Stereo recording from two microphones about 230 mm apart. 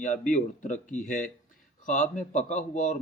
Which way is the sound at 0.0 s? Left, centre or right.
Left.